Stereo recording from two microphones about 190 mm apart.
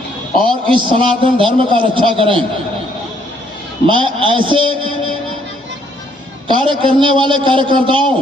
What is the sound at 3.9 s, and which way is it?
A man's voice, 25° right (ahead or behind).